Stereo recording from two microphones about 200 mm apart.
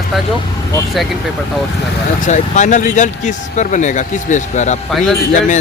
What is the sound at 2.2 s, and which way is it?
Speech, 35° left (ahead or behind).